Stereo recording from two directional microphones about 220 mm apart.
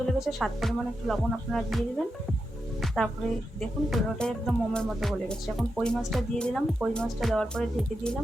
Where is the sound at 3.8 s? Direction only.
Centre (ahead or behind).